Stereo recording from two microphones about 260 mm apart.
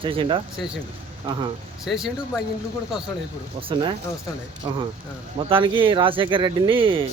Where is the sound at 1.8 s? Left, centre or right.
Centre.